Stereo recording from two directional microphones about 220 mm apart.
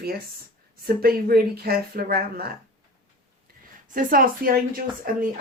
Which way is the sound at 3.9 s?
40° right (ahead or behind).